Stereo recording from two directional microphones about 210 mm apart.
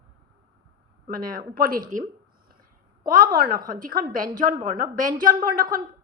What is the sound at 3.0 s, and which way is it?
A woman's voice, 45° right (ahead or behind).